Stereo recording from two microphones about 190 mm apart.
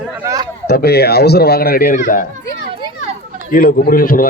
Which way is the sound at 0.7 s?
55° left (ahead or behind).